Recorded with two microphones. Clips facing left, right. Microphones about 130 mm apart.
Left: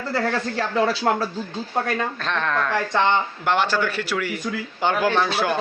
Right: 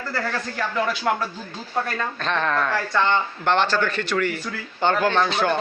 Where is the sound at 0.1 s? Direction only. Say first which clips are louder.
Left 5 dB; 30° left (ahead or behind).